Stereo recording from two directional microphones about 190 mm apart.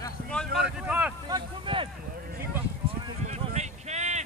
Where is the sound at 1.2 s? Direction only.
25° right (ahead or behind).